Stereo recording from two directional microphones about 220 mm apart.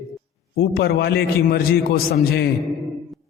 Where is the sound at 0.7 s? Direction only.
45° left (ahead or behind).